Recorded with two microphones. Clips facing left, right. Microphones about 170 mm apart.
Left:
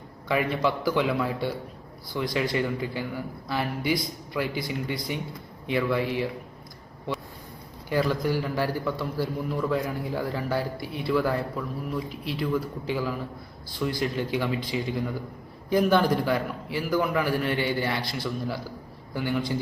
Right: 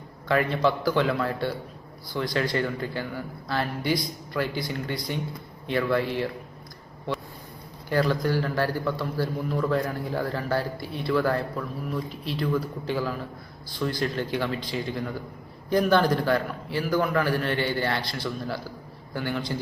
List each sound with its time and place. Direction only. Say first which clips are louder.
0.3 s a man's voice: right 2 dB; 10° left (ahead or behind)
7.9 s a man's voice: right 1 dB; 10° left (ahead or behind)